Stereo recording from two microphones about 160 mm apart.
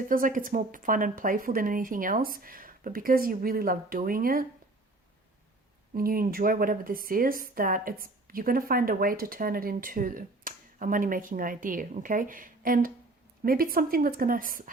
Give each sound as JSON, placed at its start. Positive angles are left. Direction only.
{"t": 0.1, "sound": "a woman's voice", "side_deg": -60}
{"t": 5.9, "sound": "a woman's voice", "side_deg": -65}